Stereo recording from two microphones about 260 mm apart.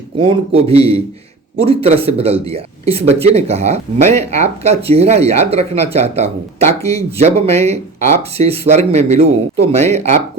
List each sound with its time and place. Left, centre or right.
0.2 s speech: centre